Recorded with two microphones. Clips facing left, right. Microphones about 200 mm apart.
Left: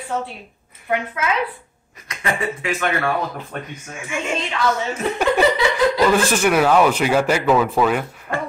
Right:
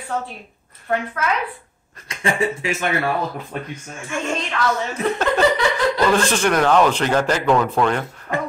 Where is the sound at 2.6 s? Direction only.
25° right (ahead or behind).